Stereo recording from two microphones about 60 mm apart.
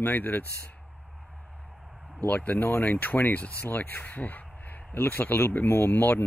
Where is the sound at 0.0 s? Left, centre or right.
Left.